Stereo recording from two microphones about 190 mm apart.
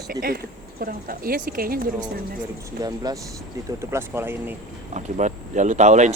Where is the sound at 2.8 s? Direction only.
20° right (ahead or behind).